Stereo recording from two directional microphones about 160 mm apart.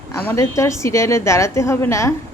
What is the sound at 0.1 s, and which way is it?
A woman's voice, 15° left (ahead or behind).